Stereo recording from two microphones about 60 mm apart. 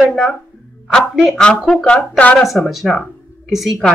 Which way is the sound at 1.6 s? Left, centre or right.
Centre.